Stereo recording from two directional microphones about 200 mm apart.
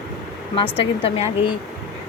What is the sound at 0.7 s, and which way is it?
Speech, 30° left (ahead or behind).